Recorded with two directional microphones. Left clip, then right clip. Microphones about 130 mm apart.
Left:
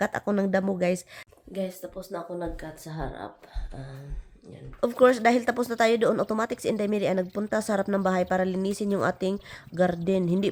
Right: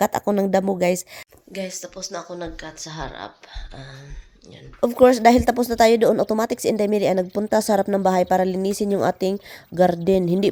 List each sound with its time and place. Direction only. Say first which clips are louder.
0.0 s a woman's voice: right 7 dB; 35° right (ahead or behind)
1.5 s speech: right 3 dB; 10° left (ahead or behind)
4.8 s speech: right 6 dB; 30° right (ahead or behind)